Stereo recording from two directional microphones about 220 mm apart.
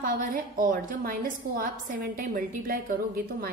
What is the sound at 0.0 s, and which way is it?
A woman's voice, 40° right (ahead or behind).